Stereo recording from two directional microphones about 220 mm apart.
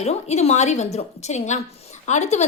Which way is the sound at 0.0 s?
30° left (ahead or behind).